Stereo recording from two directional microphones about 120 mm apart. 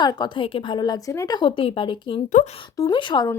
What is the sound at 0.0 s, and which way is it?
A woman's voice, 35° left (ahead or behind).